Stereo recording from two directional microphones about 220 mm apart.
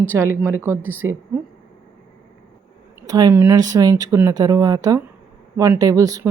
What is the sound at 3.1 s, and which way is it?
Speech, 15° right (ahead or behind).